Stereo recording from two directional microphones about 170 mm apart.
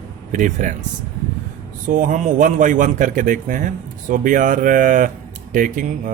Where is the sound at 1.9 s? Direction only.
50° right (ahead or behind).